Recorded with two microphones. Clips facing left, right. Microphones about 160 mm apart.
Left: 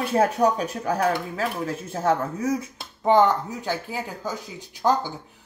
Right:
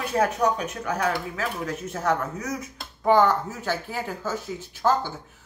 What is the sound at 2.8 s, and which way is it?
Speech, 20° left (ahead or behind).